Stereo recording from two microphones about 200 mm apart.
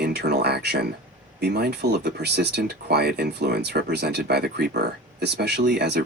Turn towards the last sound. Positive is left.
turn(degrees=-55)  # may be behind; listen again after turning